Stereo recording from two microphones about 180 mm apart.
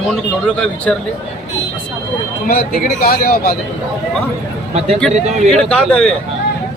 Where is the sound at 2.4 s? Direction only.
55° left (ahead or behind).